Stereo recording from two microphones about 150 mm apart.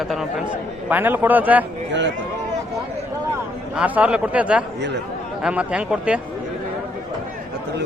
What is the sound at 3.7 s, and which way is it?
A man's voice, 10° right (ahead or behind).